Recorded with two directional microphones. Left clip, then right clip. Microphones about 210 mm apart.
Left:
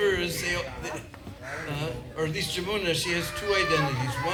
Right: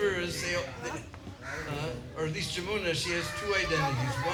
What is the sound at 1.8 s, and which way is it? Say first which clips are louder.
A man's voice: left 4 dB; 40° left (ahead or behind).